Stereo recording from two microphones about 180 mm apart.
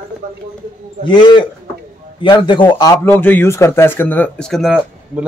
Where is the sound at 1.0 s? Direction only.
25° left (ahead or behind); by 5.3 s 5° right (ahead or behind).